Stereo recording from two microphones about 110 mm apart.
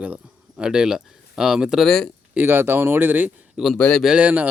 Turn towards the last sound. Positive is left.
turn(degrees=-15)  # may be behind; listen again after turning